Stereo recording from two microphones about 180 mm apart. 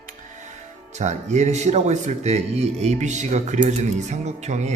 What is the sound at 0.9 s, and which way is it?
Speech, 40° right (ahead or behind).